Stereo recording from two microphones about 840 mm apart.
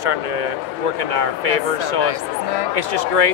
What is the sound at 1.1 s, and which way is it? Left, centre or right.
Speech, right.